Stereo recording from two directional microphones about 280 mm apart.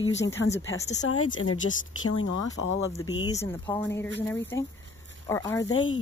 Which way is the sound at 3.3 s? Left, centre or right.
Centre.